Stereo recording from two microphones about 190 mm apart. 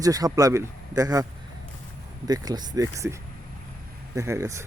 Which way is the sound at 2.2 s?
20° right (ahead or behind).